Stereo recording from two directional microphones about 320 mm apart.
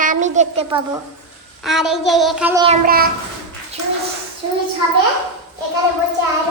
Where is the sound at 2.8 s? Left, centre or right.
Right.